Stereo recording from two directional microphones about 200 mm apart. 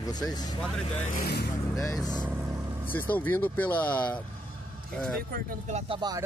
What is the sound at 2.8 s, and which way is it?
Speech, 10° left (ahead or behind).